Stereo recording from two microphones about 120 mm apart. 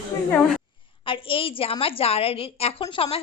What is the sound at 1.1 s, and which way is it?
Speech, 45° left (ahead or behind).